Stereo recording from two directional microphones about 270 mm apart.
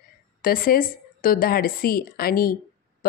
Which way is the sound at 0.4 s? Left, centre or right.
Left.